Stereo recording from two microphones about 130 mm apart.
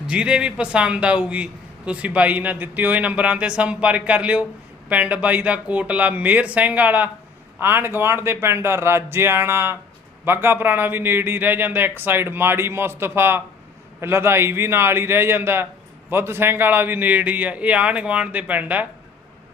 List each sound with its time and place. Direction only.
0.1 s a man's voice: 5° right (ahead or behind)